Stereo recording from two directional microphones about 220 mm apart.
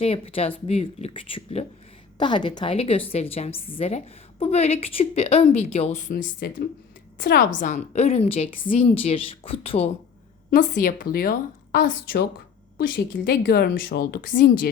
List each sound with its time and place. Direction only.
0.0 s a woman's voice: 25° left (ahead or behind); by 14.5 s 40° left (ahead or behind)